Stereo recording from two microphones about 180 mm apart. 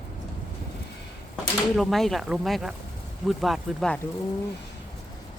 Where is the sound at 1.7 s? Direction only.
Centre (ahead or behind).